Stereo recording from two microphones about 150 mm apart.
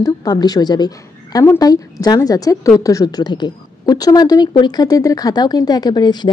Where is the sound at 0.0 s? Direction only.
25° left (ahead or behind).